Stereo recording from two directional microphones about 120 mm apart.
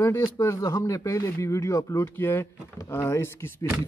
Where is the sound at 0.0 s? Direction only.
20° left (ahead or behind).